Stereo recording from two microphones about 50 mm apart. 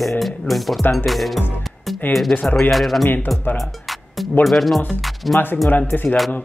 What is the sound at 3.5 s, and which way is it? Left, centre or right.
Music, centre.